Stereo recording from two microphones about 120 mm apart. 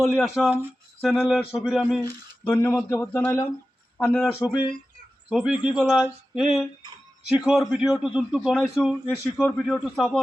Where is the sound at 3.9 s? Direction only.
5° left (ahead or behind).